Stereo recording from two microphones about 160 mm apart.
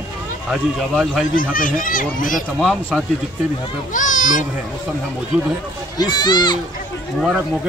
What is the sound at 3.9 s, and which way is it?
Speech, 55° left (ahead or behind).